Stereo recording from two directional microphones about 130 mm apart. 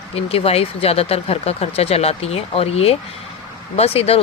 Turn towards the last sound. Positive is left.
turn(degrees=50)  # may be behind; listen again after turning